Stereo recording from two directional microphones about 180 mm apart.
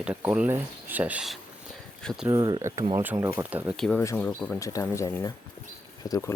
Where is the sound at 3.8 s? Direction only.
5° left (ahead or behind).